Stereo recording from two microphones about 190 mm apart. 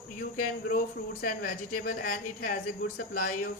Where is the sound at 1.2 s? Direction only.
50° left (ahead or behind).